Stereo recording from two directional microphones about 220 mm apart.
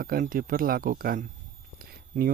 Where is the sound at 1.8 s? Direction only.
40° right (ahead or behind).